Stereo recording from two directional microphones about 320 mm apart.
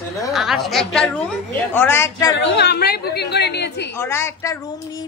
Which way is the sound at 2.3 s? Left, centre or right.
Left.